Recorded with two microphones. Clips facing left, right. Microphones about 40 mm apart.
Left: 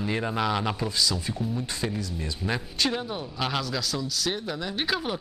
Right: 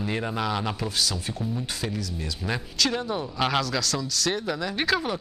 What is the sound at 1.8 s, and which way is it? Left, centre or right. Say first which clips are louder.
Speech: even; left.